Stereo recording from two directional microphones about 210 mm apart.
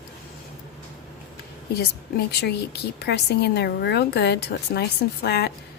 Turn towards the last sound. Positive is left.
turn(degrees=50)  # may be behind; listen again after turning